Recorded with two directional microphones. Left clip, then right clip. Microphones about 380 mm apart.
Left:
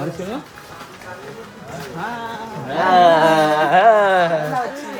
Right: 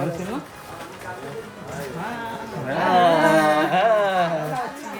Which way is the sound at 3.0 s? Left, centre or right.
Left.